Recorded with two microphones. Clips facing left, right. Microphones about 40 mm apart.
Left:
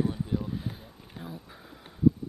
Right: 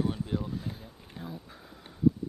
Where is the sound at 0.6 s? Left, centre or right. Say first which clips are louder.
Left 1 dB; centre.